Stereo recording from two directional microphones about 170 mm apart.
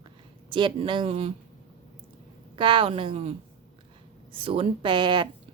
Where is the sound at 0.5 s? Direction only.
30° right (ahead or behind).